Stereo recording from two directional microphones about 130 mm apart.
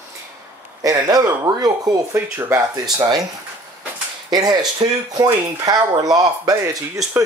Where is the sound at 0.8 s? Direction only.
25° right (ahead or behind).